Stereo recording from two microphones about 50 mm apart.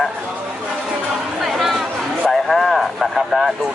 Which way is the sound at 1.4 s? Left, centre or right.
Centre.